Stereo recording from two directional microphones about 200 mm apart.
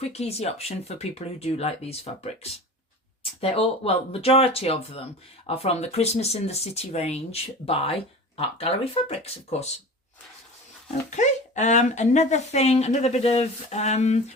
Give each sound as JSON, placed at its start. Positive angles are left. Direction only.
{"t": 0.0, "sound": "speech", "side_deg": 30}
{"t": 11.1, "sound": "speech", "side_deg": 35}